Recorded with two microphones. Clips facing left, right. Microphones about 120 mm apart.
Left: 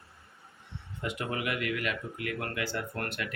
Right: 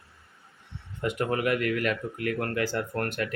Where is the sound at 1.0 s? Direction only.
50° right (ahead or behind).